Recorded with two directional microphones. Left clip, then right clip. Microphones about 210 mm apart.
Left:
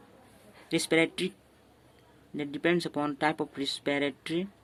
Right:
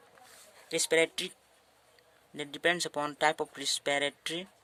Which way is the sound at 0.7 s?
35° right (ahead or behind).